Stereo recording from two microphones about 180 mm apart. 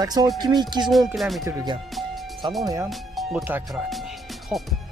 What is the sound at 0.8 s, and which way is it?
Speech, centre (ahead or behind).